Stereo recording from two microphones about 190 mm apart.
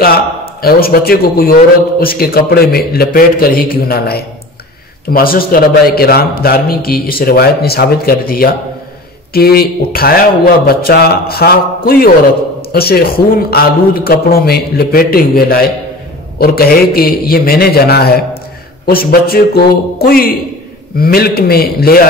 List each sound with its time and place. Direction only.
0.0 s a man's voice: 50° left (ahead or behind)